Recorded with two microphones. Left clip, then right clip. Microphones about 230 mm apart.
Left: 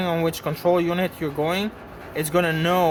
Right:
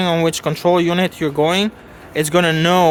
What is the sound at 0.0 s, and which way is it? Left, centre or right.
Speech, right.